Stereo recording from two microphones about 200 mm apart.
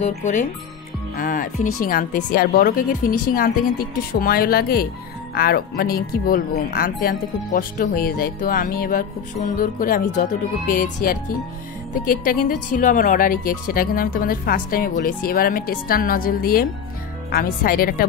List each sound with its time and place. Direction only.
0.0 s speech: 40° left (ahead or behind)